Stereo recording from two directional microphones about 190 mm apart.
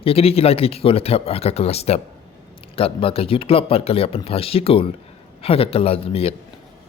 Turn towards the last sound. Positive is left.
turn(degrees=30)  # may be behind; listen again after turning